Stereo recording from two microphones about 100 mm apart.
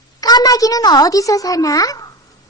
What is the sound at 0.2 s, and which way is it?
A child's voice, 40° left (ahead or behind).